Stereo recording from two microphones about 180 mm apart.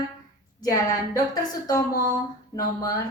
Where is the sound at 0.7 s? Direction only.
20° left (ahead or behind).